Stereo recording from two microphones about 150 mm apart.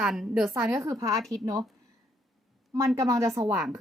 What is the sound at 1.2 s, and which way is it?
Speech, 5° left (ahead or behind).